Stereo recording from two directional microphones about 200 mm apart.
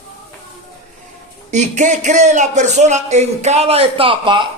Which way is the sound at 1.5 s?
35° right (ahead or behind).